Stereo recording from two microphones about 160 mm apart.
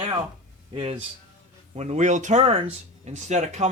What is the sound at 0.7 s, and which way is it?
Speech, 35° right (ahead or behind).